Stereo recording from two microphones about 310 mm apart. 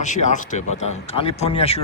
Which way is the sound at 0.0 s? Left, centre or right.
Left.